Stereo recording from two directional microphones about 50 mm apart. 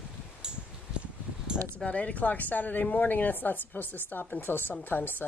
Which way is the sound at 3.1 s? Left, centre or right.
Left.